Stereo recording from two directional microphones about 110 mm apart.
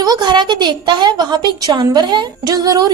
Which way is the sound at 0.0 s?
40° right (ahead or behind).